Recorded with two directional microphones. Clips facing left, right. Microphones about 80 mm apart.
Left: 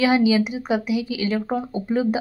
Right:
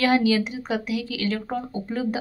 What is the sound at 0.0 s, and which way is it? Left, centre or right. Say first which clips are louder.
A woman's voice: left 2 dB; centre.